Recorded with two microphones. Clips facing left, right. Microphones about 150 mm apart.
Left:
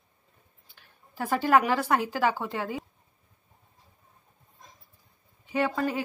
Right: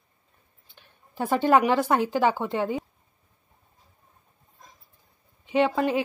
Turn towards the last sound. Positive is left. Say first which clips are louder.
# right 5 dB
turn(degrees=-20)  # may be behind; listen again after turning